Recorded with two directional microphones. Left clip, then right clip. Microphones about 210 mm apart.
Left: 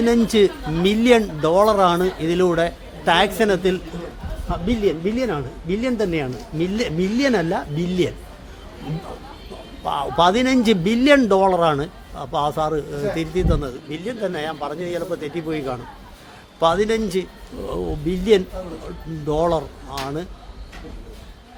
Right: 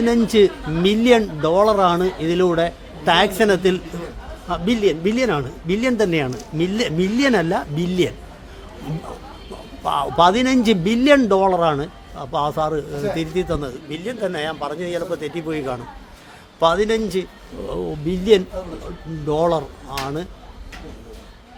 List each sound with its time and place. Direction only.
0.0 s a man's voice: 5° right (ahead or behind)
9.8 s a man's voice: 10° right (ahead or behind)